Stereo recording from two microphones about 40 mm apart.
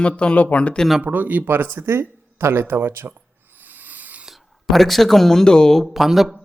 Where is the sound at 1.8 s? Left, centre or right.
Right.